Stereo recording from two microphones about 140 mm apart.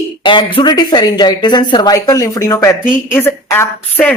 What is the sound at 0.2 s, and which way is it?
Speech, 35° left (ahead or behind).